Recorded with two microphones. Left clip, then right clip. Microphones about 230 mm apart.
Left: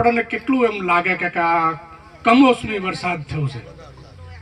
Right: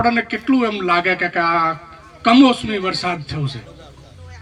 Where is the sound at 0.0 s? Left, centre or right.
Right.